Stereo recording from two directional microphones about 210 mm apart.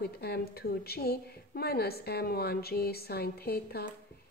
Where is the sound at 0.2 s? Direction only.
50° left (ahead or behind).